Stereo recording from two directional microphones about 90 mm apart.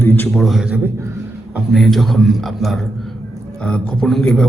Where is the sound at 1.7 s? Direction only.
Centre (ahead or behind).